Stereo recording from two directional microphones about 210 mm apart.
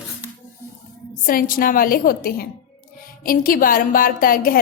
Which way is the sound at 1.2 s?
40° left (ahead or behind).